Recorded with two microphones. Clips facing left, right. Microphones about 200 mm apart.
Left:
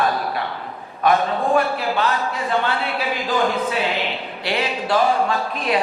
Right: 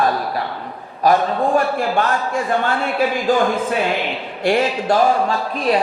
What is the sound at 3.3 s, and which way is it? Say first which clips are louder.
Speech: right 1 dB; 45° right (ahead or behind).